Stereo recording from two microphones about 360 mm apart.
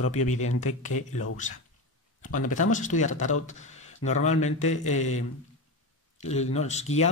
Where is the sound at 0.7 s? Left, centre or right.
Left.